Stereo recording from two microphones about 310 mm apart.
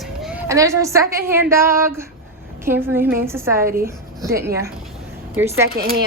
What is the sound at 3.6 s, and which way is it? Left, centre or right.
Speech, right.